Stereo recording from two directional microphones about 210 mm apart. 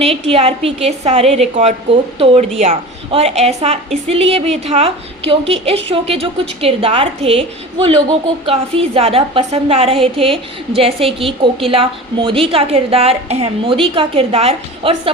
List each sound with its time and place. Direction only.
0.0 s a woman's voice: 30° right (ahead or behind)